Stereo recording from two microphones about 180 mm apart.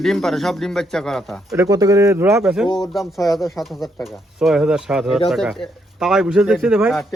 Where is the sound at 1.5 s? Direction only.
20° right (ahead or behind).